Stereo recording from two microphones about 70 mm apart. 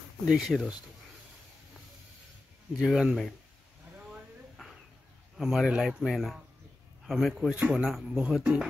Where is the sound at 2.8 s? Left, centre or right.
Centre.